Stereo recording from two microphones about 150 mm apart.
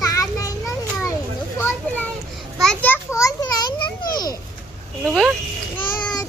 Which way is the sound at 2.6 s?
5° left (ahead or behind).